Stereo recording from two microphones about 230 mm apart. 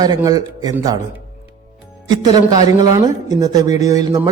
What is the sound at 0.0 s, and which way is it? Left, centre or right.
Speech, centre.